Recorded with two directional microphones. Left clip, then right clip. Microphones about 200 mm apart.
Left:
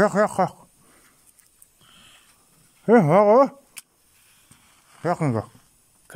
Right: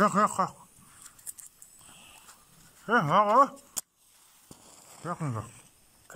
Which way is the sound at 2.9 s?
25° left (ahead or behind).